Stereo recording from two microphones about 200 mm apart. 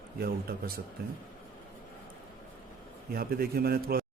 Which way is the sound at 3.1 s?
50° right (ahead or behind).